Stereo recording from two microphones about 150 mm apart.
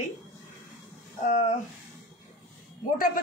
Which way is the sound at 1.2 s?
55° left (ahead or behind).